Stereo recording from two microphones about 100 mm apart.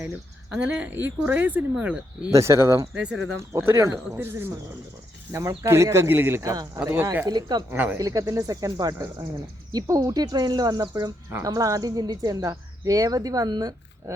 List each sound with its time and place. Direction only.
0.5 s speech: 10° right (ahead or behind)
2.3 s speech: 30° right (ahead or behind)
2.9 s speech: 10° right (ahead or behind)
3.6 s speech: 25° right (ahead or behind)
6.9 s speech: 25° right (ahead or behind)
7.3 s speech: 40° right (ahead or behind)
7.7 s speech: 15° right (ahead or behind)
7.9 s speech: 35° right (ahead or behind)